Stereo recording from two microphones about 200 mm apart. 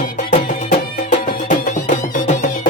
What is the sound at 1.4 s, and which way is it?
Music, 40° left (ahead or behind).